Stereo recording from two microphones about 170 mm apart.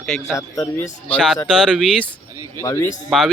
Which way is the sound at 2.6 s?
20° left (ahead or behind).